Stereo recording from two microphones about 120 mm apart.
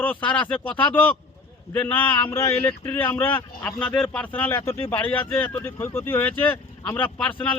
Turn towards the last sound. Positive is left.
turn(degrees=10)  # may be behind; listen again after turning